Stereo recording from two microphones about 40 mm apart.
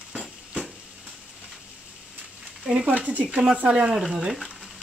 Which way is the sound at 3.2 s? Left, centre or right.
Right.